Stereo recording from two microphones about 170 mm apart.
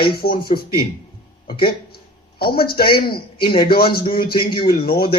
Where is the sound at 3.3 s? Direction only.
30° left (ahead or behind).